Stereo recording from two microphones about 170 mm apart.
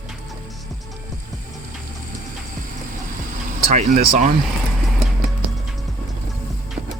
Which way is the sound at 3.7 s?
45° right (ahead or behind).